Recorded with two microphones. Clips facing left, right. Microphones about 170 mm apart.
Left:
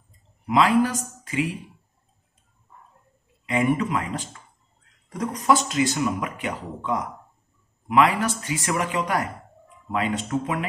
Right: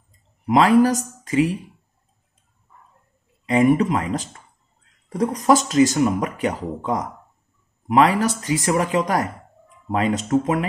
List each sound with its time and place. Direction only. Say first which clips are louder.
0.5 s speech: right 5 dB; 40° right (ahead or behind)
1.2 s a sound: right 7 dB; 35° right (ahead or behind)
3.4 s speech: right 6 dB; 35° right (ahead or behind)